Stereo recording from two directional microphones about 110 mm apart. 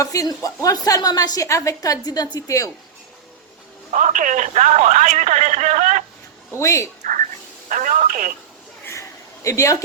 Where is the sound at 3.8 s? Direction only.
90° right.